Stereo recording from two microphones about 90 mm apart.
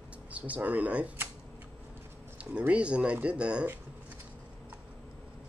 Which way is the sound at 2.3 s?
15° right (ahead or behind).